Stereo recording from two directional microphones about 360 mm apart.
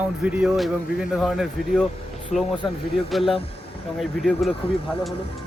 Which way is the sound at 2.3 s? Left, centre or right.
Centre.